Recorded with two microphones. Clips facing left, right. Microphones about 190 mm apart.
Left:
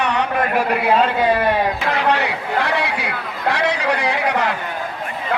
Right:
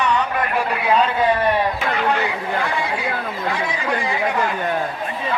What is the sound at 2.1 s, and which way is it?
Speech, 75° left (ahead or behind).